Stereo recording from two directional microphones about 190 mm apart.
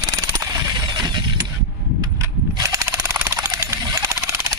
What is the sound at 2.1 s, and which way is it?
Jackhammer, 15° right (ahead or behind).